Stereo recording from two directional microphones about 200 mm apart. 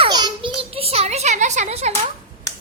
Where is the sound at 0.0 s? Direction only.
25° right (ahead or behind).